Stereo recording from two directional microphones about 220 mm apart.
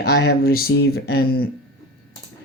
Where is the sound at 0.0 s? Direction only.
45° left (ahead or behind).